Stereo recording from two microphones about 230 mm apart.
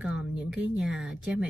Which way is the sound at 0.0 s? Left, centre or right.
Centre.